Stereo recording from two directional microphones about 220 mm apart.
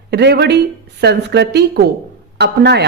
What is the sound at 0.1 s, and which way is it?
A woman's voice, 50° right (ahead or behind).